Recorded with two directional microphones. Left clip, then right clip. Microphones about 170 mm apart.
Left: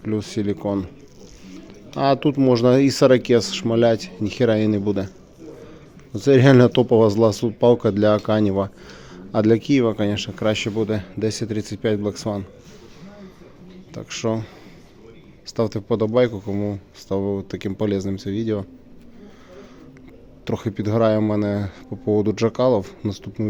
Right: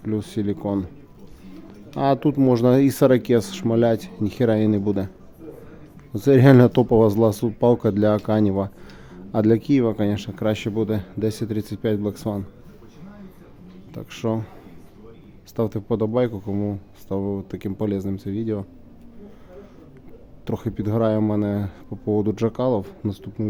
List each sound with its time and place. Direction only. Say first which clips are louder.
0.0 s speech: left 2 dB; 20° right (ahead or behind)
2.0 s speech: left 1 dB; 20° right (ahead or behind)
6.1 s speech: left 1 dB; 30° right (ahead or behind)
13.9 s speech: left 2 dB; 20° right (ahead or behind)
15.5 s speech: left 2 dB; 20° right (ahead or behind)
20.4 s speech: left 2 dB; 15° right (ahead or behind)